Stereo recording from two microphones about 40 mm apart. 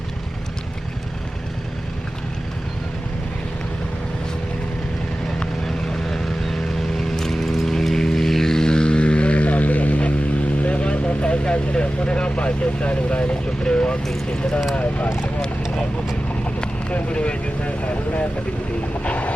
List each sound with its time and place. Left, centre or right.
5.6 s vehicle: centre; by 14.0 s left
14.8 s a sound: left
16.9 s vehicle: left